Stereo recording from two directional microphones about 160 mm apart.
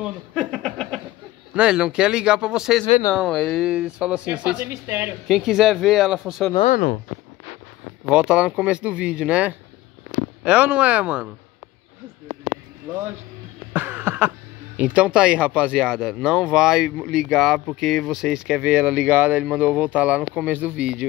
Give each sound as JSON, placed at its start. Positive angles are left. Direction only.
{"t": 0.3, "sound": "a sound", "side_deg": 5}
{"t": 1.5, "sound": "speech", "side_deg": -5}
{"t": 5.3, "sound": "speech", "side_deg": -5}
{"t": 6.7, "sound": "speech", "side_deg": 60}
{"t": 8.1, "sound": "speech", "side_deg": -5}
{"t": 13.7, "sound": "a sound", "side_deg": -15}
{"t": 14.8, "sound": "speech", "side_deg": -5}